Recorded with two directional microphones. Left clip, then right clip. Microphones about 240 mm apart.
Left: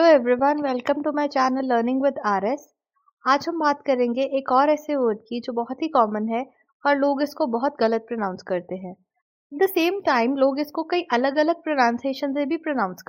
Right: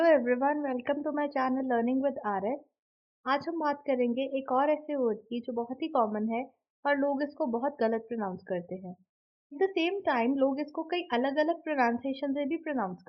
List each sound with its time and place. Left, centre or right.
0.0 s a woman's voice: left